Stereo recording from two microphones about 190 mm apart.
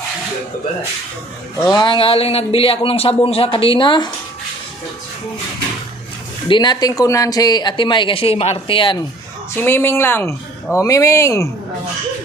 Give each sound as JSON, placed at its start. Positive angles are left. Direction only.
{"t": 1.6, "sound": "speech", "side_deg": 20}
{"t": 6.5, "sound": "speech", "side_deg": 20}
{"t": 9.5, "sound": "speech", "side_deg": 10}